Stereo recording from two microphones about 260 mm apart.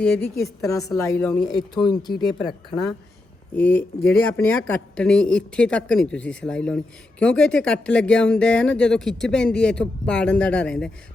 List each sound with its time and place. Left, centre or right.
0.0 s a woman's voice: centre
2.0 s a woman's voice: centre